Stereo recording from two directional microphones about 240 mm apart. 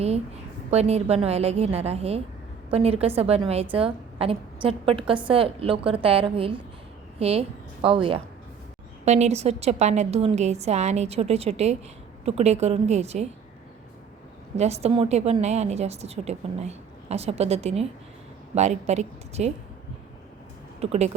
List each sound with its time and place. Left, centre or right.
0.7 s a woman's voice: right
14.5 s a woman's voice: right
20.9 s a woman's voice: right